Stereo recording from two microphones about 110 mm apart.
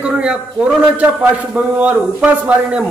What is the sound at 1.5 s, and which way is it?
A man's voice, 10° right (ahead or behind).